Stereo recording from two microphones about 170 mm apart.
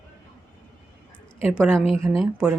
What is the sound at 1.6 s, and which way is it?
Speech, 5° right (ahead or behind).